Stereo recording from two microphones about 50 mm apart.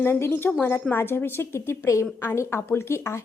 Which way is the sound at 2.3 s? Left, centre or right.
Left.